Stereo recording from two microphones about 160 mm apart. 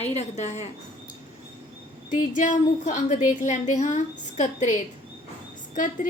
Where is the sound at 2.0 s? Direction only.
55° left (ahead or behind).